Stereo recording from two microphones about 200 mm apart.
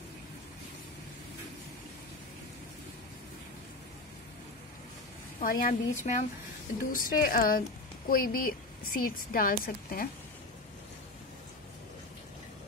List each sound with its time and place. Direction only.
5.4 s speech: 45° left (ahead or behind)